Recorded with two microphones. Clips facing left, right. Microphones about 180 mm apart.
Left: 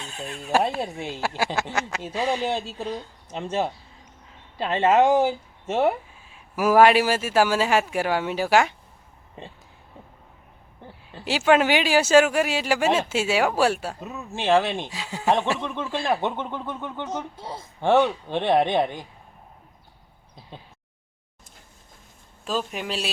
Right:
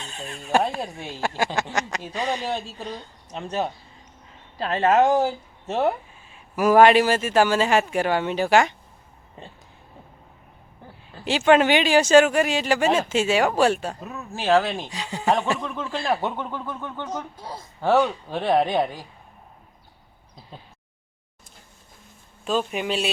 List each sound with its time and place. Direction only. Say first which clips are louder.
0.0 s speech: left 1 dB; 5° left (ahead or behind)
3.4 s speech: left 1 dB; 25° left (ahead or behind); by 8.7 s 5° left (ahead or behind)
11.3 s speech: right 2 dB; 5° left (ahead or behind)
14.4 s speech: right 1 dB; 20° left (ahead or behind)
14.8 s speech: right 1 dB; 5° left (ahead or behind)
22.4 s speech: right 4 dB; centre (ahead or behind)